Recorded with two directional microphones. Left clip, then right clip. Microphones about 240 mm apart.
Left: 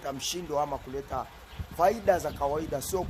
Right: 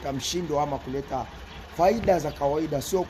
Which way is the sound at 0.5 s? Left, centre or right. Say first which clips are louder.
Right 3 dB; left.